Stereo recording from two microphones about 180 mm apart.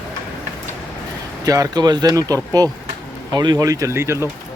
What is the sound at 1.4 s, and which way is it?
Speech, 20° right (ahead or behind).